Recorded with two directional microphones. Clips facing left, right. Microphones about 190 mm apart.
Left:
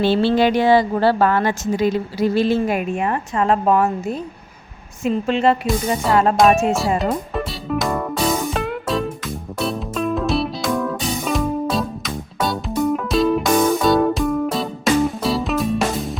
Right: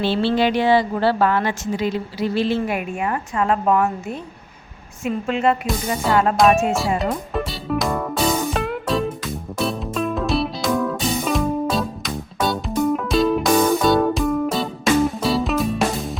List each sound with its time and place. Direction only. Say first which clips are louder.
0.0 s a woman's voice: left 3 dB; 45° left (ahead or behind)
5.0 s speech: left 3 dB; 30° left (ahead or behind)
6.3 s music: left 1 dB; centre (ahead or behind)